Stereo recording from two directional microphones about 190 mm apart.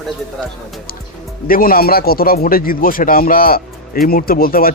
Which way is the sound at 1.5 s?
50° left (ahead or behind).